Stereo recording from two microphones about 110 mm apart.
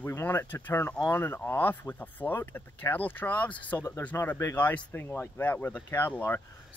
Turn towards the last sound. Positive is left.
turn(degrees=20)  # may be behind; listen again after turning